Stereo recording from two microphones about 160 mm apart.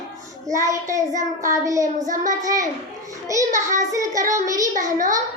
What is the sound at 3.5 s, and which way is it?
Child singing, 50° right (ahead or behind).